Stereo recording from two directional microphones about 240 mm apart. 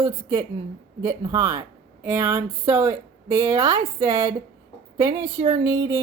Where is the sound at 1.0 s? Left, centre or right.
Centre.